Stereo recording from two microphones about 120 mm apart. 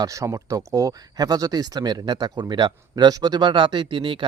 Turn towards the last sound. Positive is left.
turn(degrees=-45)  # may be behind; listen again after turning